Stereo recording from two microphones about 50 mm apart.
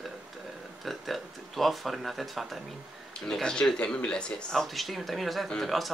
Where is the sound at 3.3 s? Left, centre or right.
Centre.